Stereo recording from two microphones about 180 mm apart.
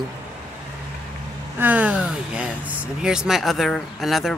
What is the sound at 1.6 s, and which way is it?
Speech, 10° right (ahead or behind).